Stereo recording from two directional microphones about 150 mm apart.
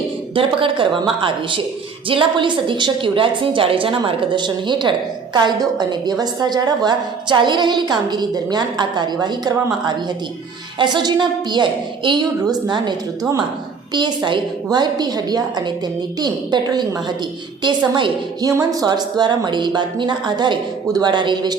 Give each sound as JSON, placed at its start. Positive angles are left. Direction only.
{"t": 0.3, "sound": "a woman's voice", "side_deg": -35}